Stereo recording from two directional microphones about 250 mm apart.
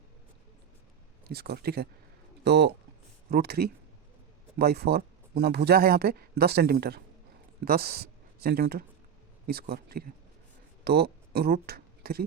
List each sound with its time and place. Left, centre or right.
1.3 s speech: right